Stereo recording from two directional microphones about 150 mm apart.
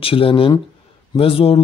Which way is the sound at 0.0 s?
35° left (ahead or behind).